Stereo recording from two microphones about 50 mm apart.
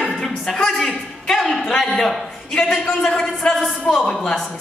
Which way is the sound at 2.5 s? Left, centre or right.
Centre.